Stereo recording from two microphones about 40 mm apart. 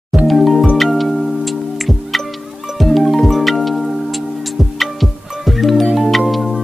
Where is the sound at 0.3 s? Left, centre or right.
Centre.